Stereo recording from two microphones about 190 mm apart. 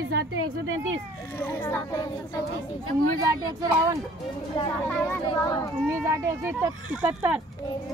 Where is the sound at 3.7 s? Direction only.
15° right (ahead or behind).